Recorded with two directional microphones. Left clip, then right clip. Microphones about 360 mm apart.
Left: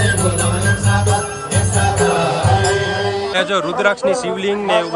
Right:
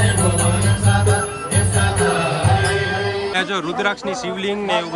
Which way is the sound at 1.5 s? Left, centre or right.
Left.